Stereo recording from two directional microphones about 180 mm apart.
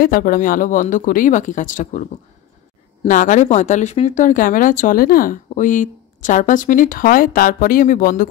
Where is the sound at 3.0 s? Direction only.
45° left (ahead or behind).